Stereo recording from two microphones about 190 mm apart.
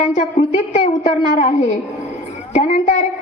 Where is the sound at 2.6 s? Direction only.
35° left (ahead or behind).